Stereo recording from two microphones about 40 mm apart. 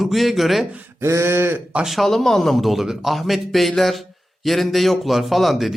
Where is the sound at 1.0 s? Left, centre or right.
Right.